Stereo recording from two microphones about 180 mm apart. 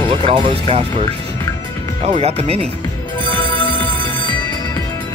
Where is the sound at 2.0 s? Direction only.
35° right (ahead or behind).